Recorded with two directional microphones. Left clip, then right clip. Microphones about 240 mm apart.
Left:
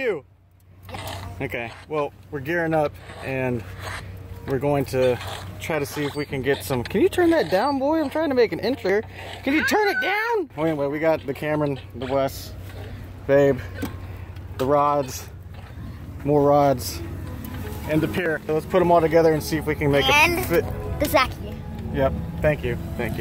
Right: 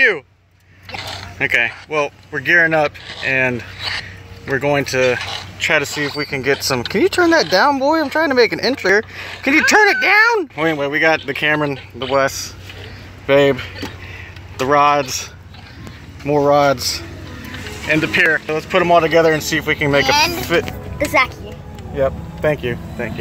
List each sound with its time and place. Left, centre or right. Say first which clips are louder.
1.4 s speech: right 15 dB; centre
14.7 s speech: right 7 dB; centre
16.3 s speech: right 4 dB; centre
17.8 s speech: right 9 dB; centre
18.5 s speech: right 5 dB; centre
22.4 s speech: right 4 dB; right